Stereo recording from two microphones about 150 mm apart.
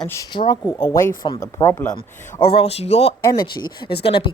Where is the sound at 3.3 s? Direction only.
30° left (ahead or behind).